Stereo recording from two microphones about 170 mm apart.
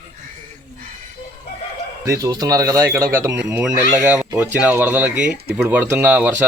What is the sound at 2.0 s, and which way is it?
Speech, 20° right (ahead or behind).